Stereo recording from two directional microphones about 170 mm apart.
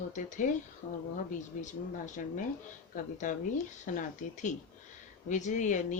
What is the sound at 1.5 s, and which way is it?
Speech, 45° left (ahead or behind).